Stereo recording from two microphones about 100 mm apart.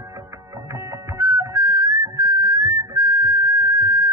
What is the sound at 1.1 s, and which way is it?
Music, 30° right (ahead or behind).